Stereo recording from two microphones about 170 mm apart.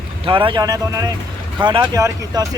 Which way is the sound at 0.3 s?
30° right (ahead or behind).